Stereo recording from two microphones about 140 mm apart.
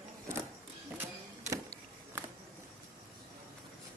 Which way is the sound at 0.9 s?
15° right (ahead or behind).